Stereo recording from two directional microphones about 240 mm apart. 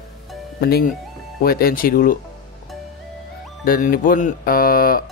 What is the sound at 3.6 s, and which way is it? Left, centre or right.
Speech, left.